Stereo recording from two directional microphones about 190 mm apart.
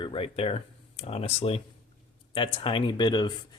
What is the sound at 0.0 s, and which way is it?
Speech, 30° left (ahead or behind).